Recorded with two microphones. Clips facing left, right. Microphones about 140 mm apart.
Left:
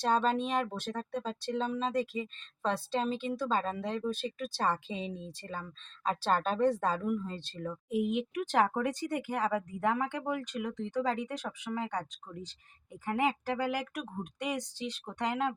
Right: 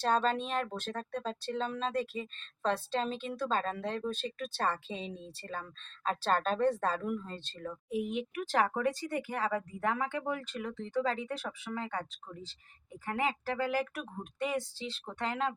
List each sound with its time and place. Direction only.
0.0 s speech: 15° left (ahead or behind)